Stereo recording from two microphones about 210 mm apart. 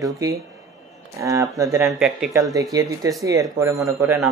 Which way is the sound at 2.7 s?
15° right (ahead or behind).